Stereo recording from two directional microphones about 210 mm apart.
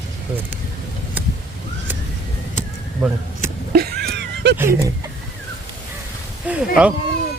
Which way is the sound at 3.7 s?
50° right (ahead or behind).